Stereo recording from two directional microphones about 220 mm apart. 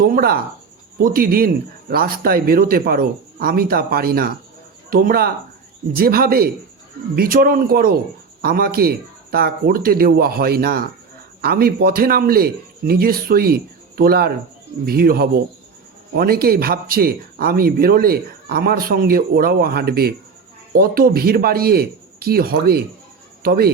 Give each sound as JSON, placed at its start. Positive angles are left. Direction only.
{"t": 0.0, "sound": "a man's voice", "side_deg": -40}